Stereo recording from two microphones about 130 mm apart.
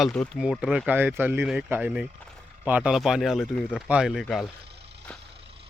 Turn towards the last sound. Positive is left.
turn(degrees=-5)  # may be behind; listen again after turning